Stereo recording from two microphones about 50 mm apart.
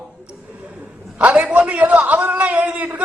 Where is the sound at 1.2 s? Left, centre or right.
Right.